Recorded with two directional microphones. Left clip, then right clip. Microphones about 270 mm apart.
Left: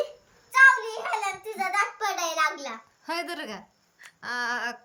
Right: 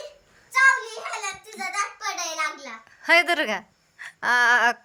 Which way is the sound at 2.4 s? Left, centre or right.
Centre.